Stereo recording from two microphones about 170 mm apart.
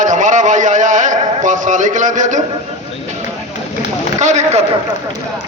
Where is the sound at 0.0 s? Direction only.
45° right (ahead or behind).